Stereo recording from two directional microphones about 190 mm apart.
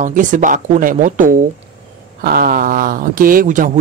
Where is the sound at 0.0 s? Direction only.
40° right (ahead or behind).